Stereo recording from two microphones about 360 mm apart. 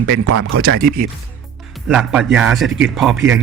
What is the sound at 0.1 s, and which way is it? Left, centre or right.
Speech, right.